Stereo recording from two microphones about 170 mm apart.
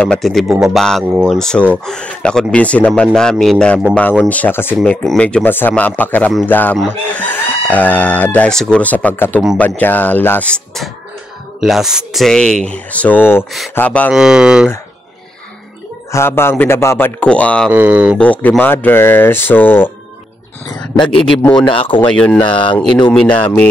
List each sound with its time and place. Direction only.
0.0 s speech: 5° left (ahead or behind)
14.1 s speech: 5° right (ahead or behind)
16.1 s speech: 15° left (ahead or behind)
17.6 s speech: 10° right (ahead or behind)
18.1 s speech: 10° left (ahead or behind)
20.6 s speech: 25° left (ahead or behind)
22.1 s speech: 5° left (ahead or behind)